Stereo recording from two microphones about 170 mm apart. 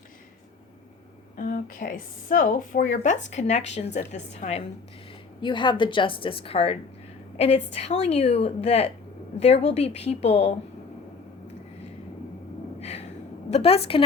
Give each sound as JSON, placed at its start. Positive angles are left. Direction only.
{"t": 1.4, "sound": "a woman's voice", "side_deg": 55}
{"t": 5.4, "sound": "a woman's voice", "side_deg": 30}
{"t": 12.8, "sound": "gasp", "side_deg": 40}
{"t": 13.5, "sound": "a woman's voice", "side_deg": 35}